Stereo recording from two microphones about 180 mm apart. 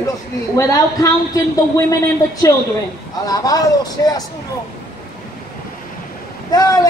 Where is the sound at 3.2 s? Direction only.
20° left (ahead or behind).